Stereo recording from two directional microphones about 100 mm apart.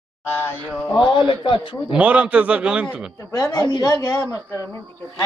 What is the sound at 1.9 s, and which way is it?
A man's voice, 15° right (ahead or behind).